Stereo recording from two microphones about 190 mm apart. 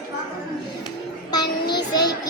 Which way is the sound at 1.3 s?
20° left (ahead or behind).